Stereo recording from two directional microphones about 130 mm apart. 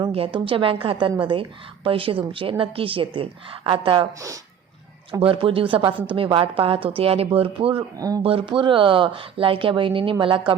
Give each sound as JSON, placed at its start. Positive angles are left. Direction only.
{"t": 0.1, "sound": "a woman's voice", "side_deg": -45}
{"t": 5.2, "sound": "a woman's voice", "side_deg": -45}
{"t": 7.9, "sound": "speech", "side_deg": -30}
{"t": 8.2, "sound": "speech", "side_deg": -45}